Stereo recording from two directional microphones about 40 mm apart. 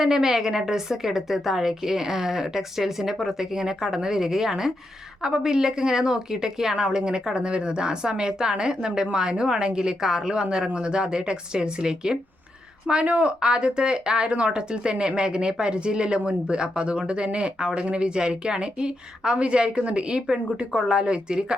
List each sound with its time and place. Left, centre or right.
0.0 s a woman's voice: centre
12.9 s speech: right